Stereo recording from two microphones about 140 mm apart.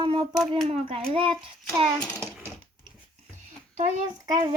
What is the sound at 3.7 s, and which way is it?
Speech, 60° right (ahead or behind).